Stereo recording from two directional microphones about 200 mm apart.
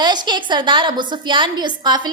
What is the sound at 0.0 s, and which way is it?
A woman's voice, 20° right (ahead or behind).